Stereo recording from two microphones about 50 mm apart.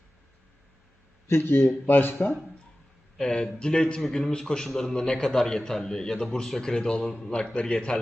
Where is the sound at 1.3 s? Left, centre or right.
Left.